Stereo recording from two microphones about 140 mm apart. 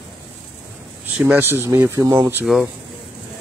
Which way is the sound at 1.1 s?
10° right (ahead or behind).